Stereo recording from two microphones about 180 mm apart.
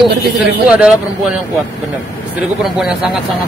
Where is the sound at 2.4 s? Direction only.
5° right (ahead or behind).